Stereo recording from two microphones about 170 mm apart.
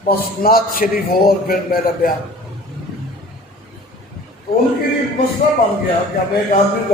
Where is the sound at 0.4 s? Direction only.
60° left (ahead or behind).